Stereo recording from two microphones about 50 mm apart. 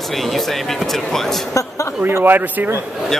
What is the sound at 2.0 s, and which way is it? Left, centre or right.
Speech, right.